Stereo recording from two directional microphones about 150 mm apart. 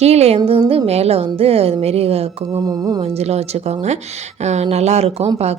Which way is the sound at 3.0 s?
45° right (ahead or behind).